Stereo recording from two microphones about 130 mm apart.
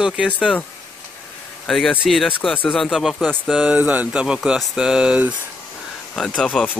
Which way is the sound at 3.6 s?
10° right (ahead or behind).